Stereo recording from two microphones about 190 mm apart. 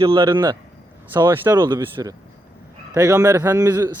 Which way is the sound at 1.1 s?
10° right (ahead or behind).